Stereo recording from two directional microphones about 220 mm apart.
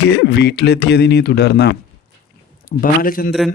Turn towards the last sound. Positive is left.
turn(degrees=40)  # may be behind; listen again after turning